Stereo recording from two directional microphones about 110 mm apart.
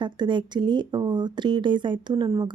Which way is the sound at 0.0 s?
45° right (ahead or behind).